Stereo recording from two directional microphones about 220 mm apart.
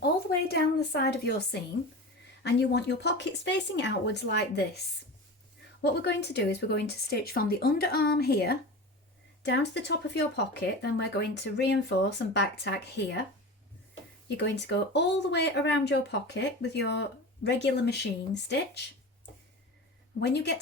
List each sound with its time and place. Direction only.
0.4 s a woman's voice: 50° left (ahead or behind)
5.8 s speech: 50° left (ahead or behind)
14.3 s speech: 50° left (ahead or behind)
20.1 s speech: 50° left (ahead or behind)